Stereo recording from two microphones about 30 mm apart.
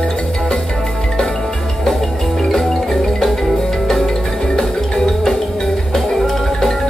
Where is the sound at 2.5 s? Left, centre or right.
Centre.